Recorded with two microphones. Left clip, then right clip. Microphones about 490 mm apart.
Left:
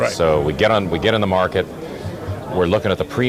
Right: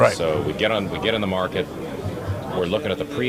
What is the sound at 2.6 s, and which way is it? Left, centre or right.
Speech, left.